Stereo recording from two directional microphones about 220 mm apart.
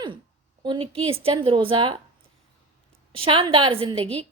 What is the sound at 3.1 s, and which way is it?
Speech, 25° right (ahead or behind).